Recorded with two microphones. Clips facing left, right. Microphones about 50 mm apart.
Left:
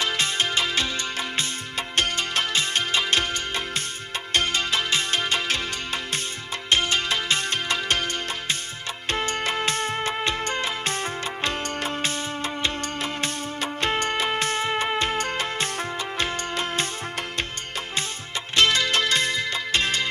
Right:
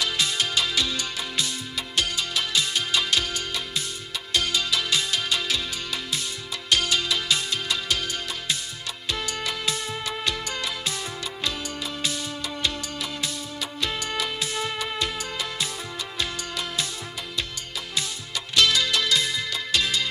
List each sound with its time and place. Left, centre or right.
0.0 s music: left
18.5 s music: left